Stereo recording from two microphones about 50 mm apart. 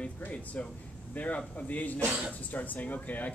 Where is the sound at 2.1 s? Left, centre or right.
Right.